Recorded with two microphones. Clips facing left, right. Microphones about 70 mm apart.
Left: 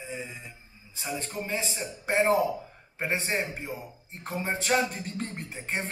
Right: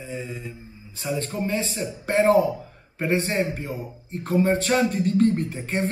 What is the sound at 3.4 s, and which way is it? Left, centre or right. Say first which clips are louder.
Beatboxing: right 7 dB; centre.